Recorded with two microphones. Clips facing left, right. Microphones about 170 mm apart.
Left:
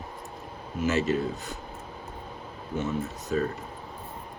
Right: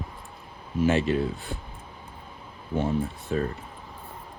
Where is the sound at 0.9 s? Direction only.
40° left (ahead or behind).